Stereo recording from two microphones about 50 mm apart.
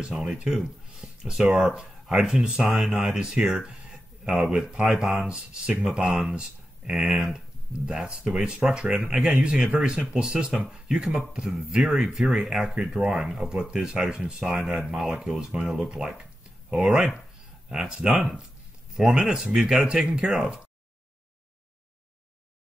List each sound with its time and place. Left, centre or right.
0.0 s speech: centre
14.4 s speech: centre